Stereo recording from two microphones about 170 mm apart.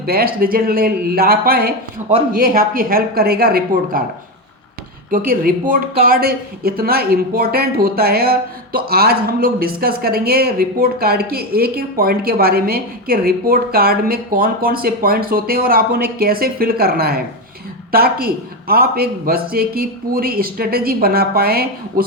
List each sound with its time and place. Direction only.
0.0 s speech: 65° right (ahead or behind)
5.1 s speech: 60° right (ahead or behind)